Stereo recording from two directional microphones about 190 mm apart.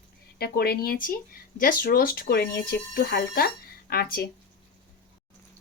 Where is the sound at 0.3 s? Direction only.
55° left (ahead or behind).